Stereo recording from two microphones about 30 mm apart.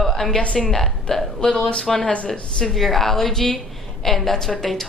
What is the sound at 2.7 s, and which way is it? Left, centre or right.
Speech, centre.